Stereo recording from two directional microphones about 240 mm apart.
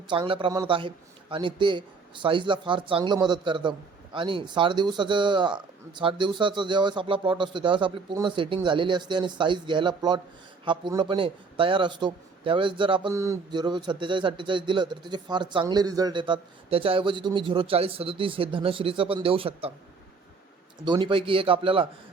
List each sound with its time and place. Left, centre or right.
0.1 s a man's voice: right
20.8 s a man's voice: centre